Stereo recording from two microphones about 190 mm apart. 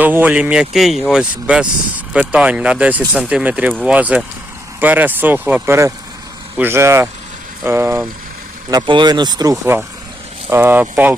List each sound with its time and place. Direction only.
0.0 s speech: 10° right (ahead or behind)
8.7 s speech: 25° right (ahead or behind)